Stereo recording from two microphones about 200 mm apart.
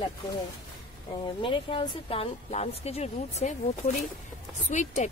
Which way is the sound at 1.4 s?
25° left (ahead or behind).